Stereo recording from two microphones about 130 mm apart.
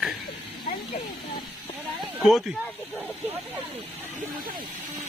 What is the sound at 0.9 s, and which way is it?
Speech, 70° left (ahead or behind).